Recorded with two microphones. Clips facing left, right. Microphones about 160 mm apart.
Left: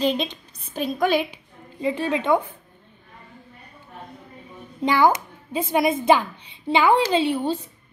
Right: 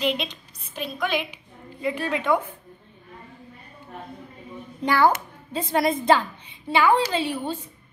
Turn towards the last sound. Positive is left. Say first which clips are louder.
# left 4 dB
turn(degrees=20)  # may be behind; listen again after turning